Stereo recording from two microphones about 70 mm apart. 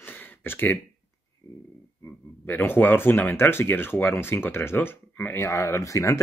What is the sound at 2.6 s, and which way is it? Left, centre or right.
Speech, left.